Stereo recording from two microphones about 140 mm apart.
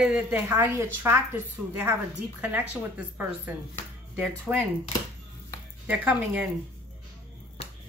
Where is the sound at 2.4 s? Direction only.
10° right (ahead or behind).